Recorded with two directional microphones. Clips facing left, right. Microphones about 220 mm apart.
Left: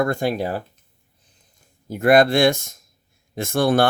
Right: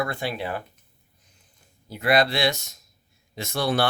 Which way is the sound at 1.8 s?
45° left (ahead or behind).